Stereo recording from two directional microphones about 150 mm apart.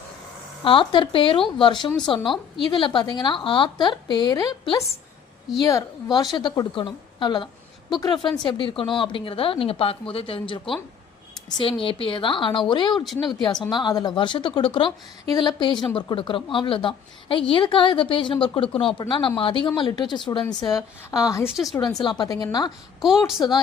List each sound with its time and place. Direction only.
0.6 s a woman's voice: 35° left (ahead or behind)
21.5 s a woman's voice: centre (ahead or behind)
22.2 s a woman's voice: 25° left (ahead or behind)
23.0 s a woman's voice: centre (ahead or behind)